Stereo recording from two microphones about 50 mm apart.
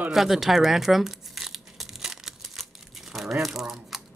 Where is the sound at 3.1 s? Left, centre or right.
Centre.